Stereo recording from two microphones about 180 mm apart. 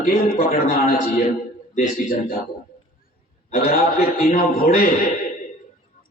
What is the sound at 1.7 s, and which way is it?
Speech, 40° left (ahead or behind).